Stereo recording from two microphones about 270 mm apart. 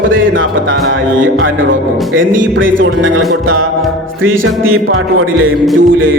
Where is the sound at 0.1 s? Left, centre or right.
Right.